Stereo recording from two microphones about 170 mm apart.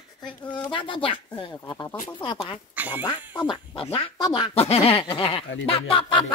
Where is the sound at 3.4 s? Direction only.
30° left (ahead or behind).